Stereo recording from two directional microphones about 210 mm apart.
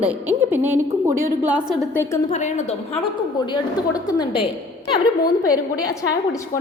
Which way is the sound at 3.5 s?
20° left (ahead or behind).